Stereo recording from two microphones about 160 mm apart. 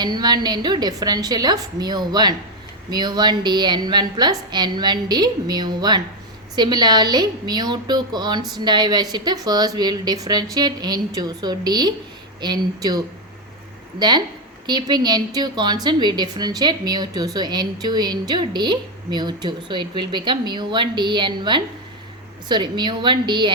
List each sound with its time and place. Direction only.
0.0 s a woman's voice: 25° right (ahead or behind)